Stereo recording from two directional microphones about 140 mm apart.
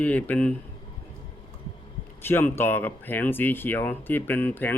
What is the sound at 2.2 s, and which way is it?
Speech, 15° left (ahead or behind).